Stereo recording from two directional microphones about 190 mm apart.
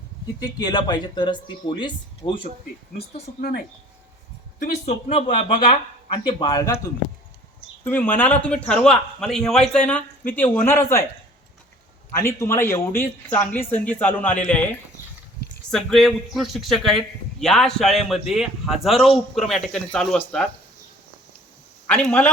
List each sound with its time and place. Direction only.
0.3 s speech: 20° left (ahead or behind)
4.6 s speech: 35° left (ahead or behind)
7.9 s speech: 10° left (ahead or behind)
12.1 s speech: 15° left (ahead or behind)
21.8 s a man's voice: 10° left (ahead or behind)